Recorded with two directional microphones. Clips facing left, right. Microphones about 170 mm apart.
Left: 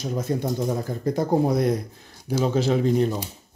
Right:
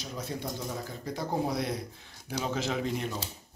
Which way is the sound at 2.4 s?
35° left (ahead or behind).